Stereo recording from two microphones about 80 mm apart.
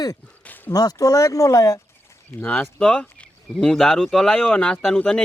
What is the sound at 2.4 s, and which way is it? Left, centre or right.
Speech, left.